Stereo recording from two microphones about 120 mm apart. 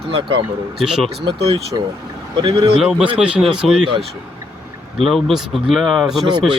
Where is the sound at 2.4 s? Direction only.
45° right (ahead or behind).